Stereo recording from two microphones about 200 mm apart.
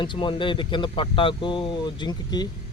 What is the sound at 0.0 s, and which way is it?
Speech, 25° left (ahead or behind).